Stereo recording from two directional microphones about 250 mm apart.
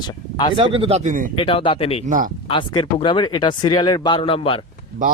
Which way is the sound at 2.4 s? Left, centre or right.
Centre.